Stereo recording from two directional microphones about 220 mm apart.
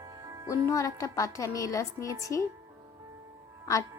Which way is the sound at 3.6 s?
15° left (ahead or behind).